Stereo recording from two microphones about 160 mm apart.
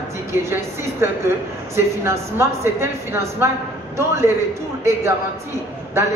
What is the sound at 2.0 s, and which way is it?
A woman's voice, 15° right (ahead or behind).